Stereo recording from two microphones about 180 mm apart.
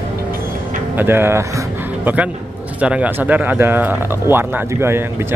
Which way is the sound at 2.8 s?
5° right (ahead or behind).